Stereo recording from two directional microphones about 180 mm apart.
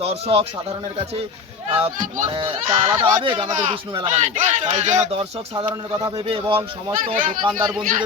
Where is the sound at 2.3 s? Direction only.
25° right (ahead or behind).